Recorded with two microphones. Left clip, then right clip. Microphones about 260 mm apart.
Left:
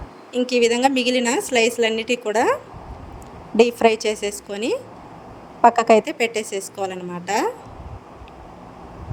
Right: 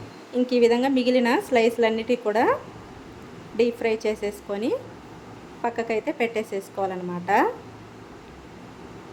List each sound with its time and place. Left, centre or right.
0.3 s a woman's voice: left
3.6 s a woman's voice: left